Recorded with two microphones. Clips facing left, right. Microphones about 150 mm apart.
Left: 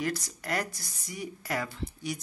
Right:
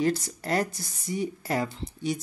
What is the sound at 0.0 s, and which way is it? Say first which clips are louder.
Speech: right 7 dB; 25° right (ahead or behind).